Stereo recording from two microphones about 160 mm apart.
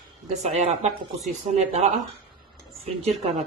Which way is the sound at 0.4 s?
45° right (ahead or behind).